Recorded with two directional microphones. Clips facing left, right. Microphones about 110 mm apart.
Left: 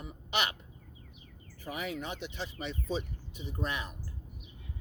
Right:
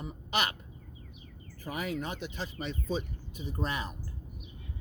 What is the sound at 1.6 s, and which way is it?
Speech, 40° right (ahead or behind).